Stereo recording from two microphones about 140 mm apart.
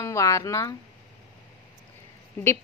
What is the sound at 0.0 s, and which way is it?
Speech, 20° left (ahead or behind).